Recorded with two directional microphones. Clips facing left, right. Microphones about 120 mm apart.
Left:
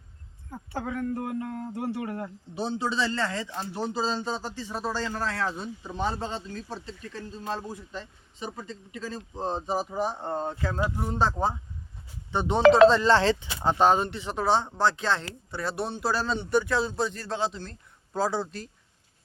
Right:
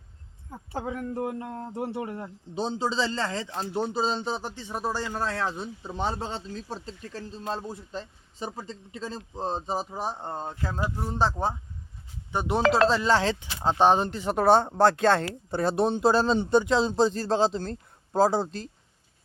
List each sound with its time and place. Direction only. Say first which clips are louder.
0.7 s speech: left 1 dB; 25° right (ahead or behind)
10.6 s speech: left 2 dB; 10° right (ahead or behind)
14.1 s speech: right 5 dB; 45° right (ahead or behind)
15.7 s speech: right 7 dB; 20° right (ahead or behind)